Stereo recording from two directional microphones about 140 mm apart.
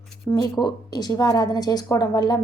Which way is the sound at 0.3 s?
30° left (ahead or behind).